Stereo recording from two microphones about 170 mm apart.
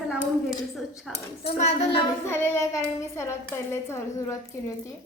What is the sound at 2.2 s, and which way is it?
A child's voice, 15° left (ahead or behind).